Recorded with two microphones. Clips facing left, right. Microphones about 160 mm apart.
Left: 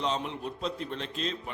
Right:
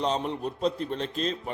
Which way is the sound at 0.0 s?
40° right (ahead or behind).